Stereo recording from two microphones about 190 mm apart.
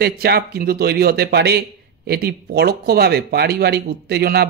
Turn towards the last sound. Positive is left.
turn(degrees=-55)  # may be behind; listen again after turning